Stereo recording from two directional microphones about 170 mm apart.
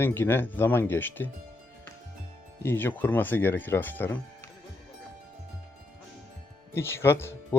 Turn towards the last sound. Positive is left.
turn(degrees=15)  # may be behind; listen again after turning